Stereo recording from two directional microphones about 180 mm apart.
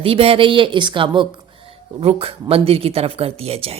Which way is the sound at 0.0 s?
30° right (ahead or behind).